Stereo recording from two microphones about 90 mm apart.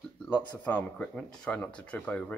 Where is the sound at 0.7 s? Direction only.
15° left (ahead or behind).